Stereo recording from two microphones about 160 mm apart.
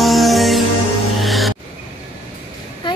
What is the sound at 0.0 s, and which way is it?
Music, centre (ahead or behind).